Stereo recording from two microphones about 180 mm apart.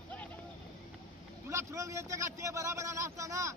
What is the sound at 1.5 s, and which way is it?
Speech, 15° right (ahead or behind).